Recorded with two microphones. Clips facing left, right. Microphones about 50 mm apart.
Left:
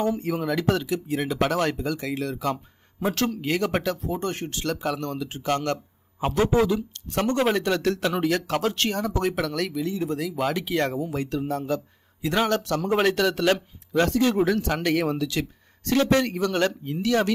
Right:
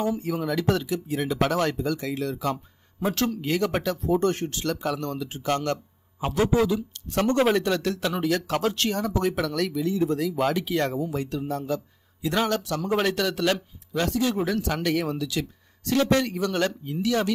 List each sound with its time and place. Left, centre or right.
0.0 s speech: left
2.5 s a sound: left
3.2 s speech: left
6.2 s speech: centre; by 8.5 s left
8.5 s speech: centre
8.7 s speech: left